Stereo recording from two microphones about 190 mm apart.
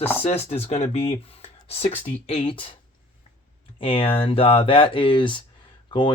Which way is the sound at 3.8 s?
30° left (ahead or behind).